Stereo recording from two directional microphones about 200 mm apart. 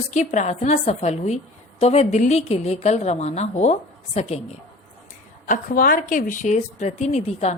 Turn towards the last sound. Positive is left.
turn(degrees=35)  # may be behind; listen again after turning